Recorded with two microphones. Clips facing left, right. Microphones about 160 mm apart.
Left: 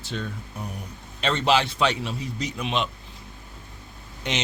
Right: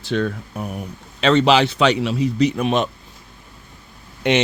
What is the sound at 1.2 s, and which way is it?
A man's voice, 85° right.